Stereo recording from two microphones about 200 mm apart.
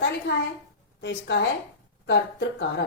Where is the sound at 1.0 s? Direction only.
60° left (ahead or behind).